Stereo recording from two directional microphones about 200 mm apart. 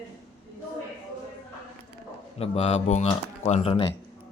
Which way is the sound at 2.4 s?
30° left (ahead or behind).